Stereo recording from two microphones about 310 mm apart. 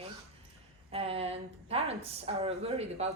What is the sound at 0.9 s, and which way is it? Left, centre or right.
Speech, centre.